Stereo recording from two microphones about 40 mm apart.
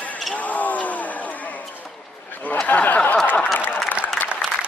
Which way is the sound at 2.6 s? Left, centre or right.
Left.